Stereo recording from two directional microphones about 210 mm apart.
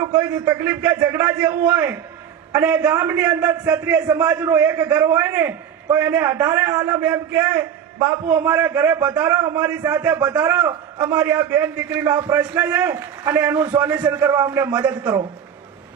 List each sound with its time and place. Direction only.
0.0 s a man's voice: 10° right (ahead or behind)
12.0 s a man's voice: 20° right (ahead or behind)
12.4 s a man's voice: 5° right (ahead or behind)